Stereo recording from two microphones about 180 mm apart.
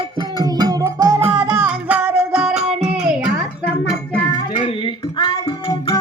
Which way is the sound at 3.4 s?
5° left (ahead or behind).